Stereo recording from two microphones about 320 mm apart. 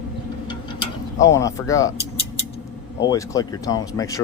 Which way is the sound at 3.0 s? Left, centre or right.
Centre.